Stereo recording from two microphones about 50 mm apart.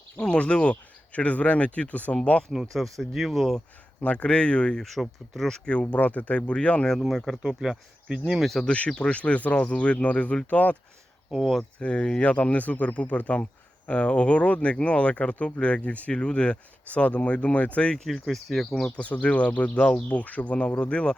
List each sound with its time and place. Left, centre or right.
0.2 s speech: left
2.5 s speech: centre
3.0 s speech: centre
4.0 s speech: left
4.8 s speech: centre
5.6 s speech: left
7.0 s speech: centre
8.6 s speech: left
11.8 s speech: left
18.1 s speech: centre
18.9 s speech: left